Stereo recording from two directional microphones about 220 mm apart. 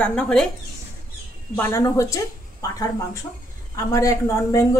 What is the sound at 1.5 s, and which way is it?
A woman's voice, 10° left (ahead or behind).